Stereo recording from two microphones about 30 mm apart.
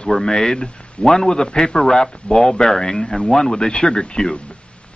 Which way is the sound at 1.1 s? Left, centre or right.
Centre.